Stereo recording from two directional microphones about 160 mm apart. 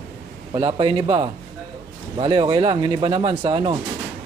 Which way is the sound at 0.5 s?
30° right (ahead or behind).